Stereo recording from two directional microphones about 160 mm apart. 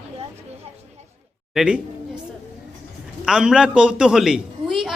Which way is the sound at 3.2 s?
5° right (ahead or behind).